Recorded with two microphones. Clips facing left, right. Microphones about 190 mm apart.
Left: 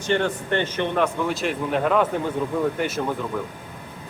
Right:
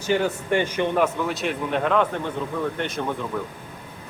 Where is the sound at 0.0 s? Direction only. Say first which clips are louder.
Even; 5° right (ahead or behind).